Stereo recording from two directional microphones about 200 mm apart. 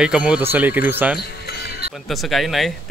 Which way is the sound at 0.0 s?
5° right (ahead or behind).